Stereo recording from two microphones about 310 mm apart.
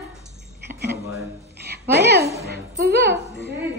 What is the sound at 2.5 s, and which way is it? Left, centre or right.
Music, right.